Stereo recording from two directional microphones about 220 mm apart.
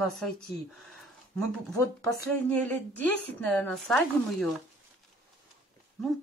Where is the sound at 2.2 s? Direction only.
5° left (ahead or behind).